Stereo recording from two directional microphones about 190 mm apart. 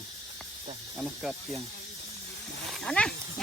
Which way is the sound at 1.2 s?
Centre (ahead or behind).